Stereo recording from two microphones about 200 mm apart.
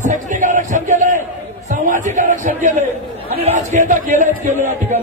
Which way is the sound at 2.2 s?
40° right (ahead or behind).